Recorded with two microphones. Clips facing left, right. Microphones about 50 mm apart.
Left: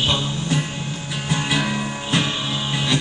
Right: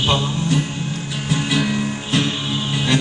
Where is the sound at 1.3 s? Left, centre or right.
Centre.